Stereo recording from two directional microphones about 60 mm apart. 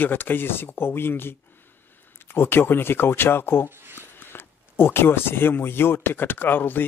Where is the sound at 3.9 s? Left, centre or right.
Left.